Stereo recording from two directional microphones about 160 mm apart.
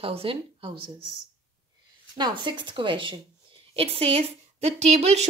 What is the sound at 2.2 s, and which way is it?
Speech, 30° right (ahead or behind).